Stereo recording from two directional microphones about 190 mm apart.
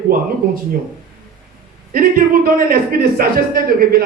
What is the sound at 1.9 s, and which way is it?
Speech, 50° right (ahead or behind).